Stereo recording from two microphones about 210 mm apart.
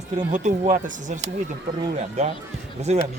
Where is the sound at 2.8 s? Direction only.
30° right (ahead or behind).